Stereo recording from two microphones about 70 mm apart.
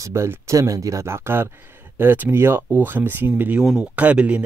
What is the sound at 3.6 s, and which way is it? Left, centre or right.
Speech, centre.